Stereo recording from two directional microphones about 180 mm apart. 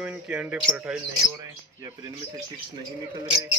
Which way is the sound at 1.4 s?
20° right (ahead or behind).